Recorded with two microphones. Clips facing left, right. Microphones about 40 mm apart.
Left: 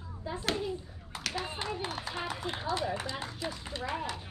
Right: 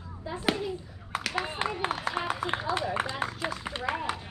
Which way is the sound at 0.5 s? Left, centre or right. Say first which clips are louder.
Right 2 dB; right.